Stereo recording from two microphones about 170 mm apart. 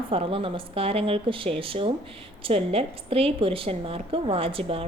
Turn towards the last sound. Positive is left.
turn(degrees=-35)  # may be behind; listen again after turning